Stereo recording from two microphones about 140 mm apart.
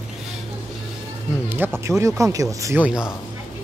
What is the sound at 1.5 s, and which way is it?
Speech, 15° right (ahead or behind).